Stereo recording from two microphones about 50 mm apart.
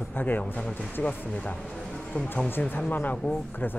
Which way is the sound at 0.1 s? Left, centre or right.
Left.